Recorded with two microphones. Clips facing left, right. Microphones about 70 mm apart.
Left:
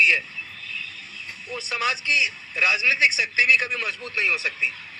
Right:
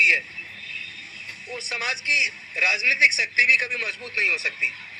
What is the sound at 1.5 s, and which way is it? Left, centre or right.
A man's voice, right.